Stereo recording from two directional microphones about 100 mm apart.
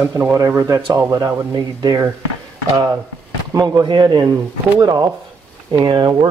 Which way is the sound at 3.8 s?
45° right (ahead or behind).